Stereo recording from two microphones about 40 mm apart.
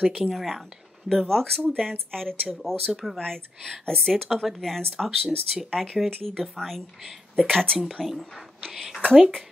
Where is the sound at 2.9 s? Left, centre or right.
Centre.